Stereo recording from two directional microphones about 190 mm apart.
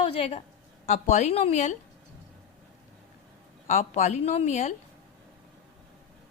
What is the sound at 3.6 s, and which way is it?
A woman's voice, 40° left (ahead or behind).